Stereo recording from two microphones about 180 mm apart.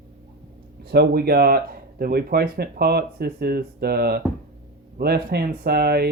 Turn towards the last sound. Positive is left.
turn(degrees=-60)  # may be behind; listen again after turning